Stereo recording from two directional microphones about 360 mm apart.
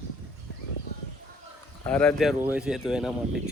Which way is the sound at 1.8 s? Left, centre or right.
Centre.